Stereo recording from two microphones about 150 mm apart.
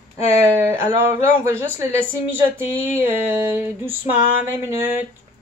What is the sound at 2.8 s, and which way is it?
Speech, 15° right (ahead or behind).